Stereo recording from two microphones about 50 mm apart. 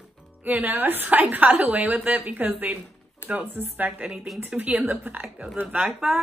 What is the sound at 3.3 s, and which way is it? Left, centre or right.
A woman's voice, right.